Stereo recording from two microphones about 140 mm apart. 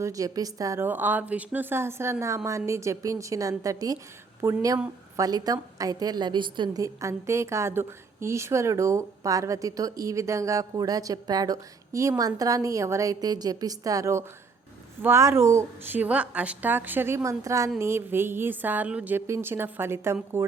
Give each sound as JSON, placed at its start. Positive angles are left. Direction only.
{"t": 0.0, "sound": "a woman's voice", "side_deg": -25}
{"t": 6.8, "sound": "a woman's voice", "side_deg": -20}